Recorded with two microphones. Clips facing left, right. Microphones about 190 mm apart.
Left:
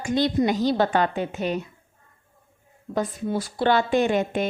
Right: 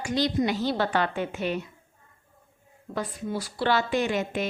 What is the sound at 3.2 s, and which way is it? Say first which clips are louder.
A woman's voice: left 3 dB; 50° left (ahead or behind).